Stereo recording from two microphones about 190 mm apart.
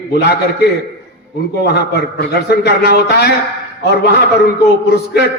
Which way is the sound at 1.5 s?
60° left (ahead or behind).